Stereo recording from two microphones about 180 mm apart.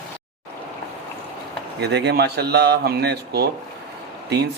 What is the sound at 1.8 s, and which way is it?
A man's voice, 70° right (ahead or behind).